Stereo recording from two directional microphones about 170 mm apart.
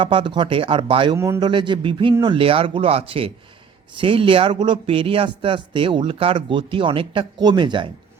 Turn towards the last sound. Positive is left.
turn(degrees=-30)  # may be behind; listen again after turning